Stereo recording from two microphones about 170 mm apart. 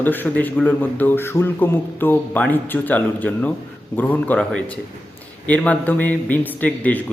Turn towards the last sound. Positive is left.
turn(degrees=10)  # may be behind; listen again after turning